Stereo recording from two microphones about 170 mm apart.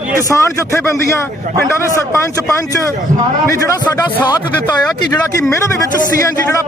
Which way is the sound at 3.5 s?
20° left (ahead or behind).